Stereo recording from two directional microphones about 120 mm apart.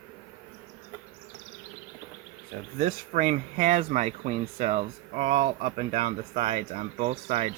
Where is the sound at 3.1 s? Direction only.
90° right.